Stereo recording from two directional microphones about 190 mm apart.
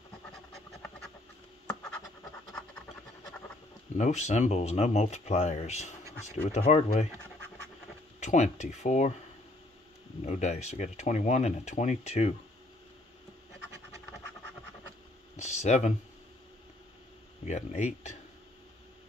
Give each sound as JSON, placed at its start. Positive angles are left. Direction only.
{"t": 4.0, "sound": "speech", "side_deg": 35}
{"t": 8.2, "sound": "speech", "side_deg": 40}
{"t": 10.2, "sound": "speech", "side_deg": 35}
{"t": 15.3, "sound": "a sound", "side_deg": 35}
{"t": 17.5, "sound": "speech", "side_deg": 35}